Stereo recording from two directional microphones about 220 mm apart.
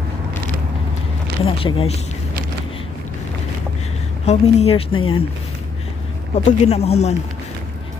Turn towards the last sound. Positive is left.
turn(degrees=30)  # may be behind; listen again after turning